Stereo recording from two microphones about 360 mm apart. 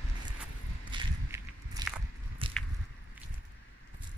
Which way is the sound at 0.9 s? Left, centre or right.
Centre.